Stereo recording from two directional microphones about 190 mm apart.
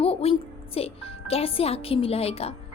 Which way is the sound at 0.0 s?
30° left (ahead or behind).